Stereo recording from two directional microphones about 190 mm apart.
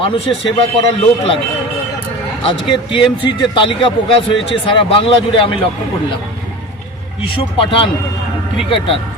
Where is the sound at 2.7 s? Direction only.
25° left (ahead or behind).